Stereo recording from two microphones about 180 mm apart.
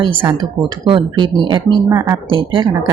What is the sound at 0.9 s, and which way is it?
A woman's voice, 25° right (ahead or behind).